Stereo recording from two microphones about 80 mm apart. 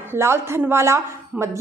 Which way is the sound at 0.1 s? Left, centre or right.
Right.